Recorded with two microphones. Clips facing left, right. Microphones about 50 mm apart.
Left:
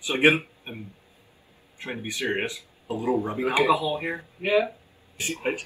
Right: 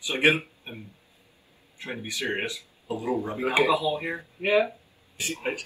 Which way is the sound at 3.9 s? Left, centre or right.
Left.